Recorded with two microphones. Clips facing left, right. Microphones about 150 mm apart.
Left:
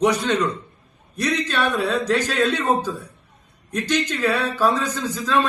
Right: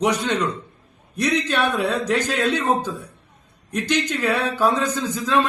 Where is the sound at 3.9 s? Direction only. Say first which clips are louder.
Even; 15° right (ahead or behind).